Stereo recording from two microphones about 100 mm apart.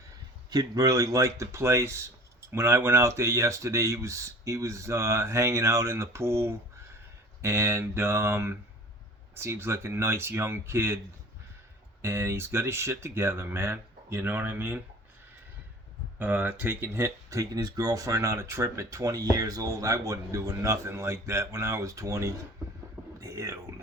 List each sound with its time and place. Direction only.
0.5 s speech: 40° right (ahead or behind); by 11.0 s 25° right (ahead or behind)
12.0 s speech: 25° right (ahead or behind)
16.1 s speech: 15° right (ahead or behind); by 23.6 s 35° right (ahead or behind)